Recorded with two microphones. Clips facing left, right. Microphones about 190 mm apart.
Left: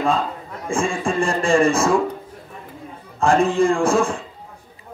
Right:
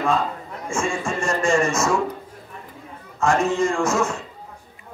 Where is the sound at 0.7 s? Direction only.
30° left (ahead or behind).